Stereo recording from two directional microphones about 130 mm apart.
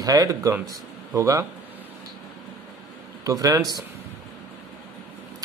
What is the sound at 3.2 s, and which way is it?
Speech, 25° right (ahead or behind).